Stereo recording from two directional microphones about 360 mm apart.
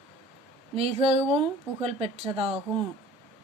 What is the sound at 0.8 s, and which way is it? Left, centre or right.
A woman's voice, centre.